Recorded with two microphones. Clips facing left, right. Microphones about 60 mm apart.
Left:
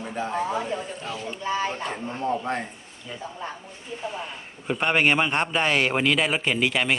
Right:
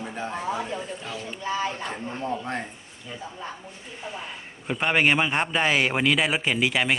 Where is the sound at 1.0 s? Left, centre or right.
Left.